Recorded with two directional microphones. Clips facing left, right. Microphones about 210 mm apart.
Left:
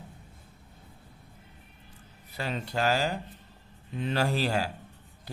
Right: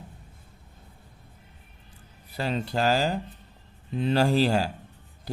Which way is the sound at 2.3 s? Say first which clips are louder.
Right 4 dB; 35° right (ahead or behind).